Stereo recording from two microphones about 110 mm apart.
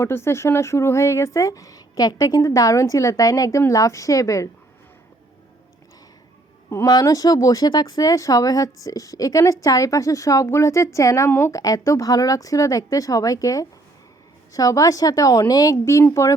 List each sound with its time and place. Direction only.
0.0 s speech: 20° left (ahead or behind)
6.8 s speech: 35° left (ahead or behind)